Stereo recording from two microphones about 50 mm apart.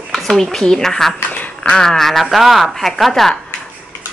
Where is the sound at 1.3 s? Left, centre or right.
Left.